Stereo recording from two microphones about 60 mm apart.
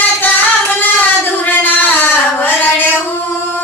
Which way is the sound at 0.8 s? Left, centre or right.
Left.